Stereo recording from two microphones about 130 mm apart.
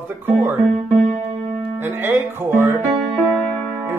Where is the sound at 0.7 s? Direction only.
70° right (ahead or behind).